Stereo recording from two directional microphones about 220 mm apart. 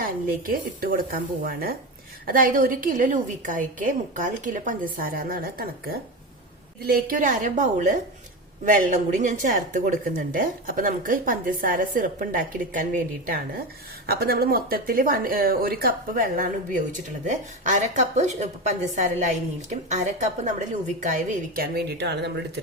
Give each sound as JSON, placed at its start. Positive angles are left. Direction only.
{"t": 0.0, "sound": "speech", "side_deg": -40}
{"t": 6.8, "sound": "speech", "side_deg": -40}
{"t": 21.5, "sound": "speech", "side_deg": -45}